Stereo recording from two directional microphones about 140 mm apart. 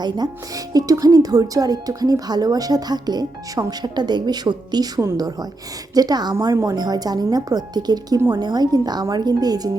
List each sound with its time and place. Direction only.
0.0 s speech: 30° right (ahead or behind)